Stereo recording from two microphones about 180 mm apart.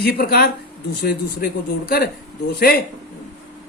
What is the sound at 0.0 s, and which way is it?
A woman's voice, 60° left (ahead or behind).